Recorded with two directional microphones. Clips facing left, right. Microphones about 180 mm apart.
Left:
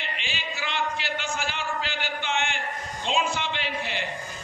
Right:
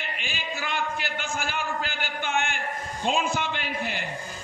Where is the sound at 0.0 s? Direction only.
50° right (ahead or behind).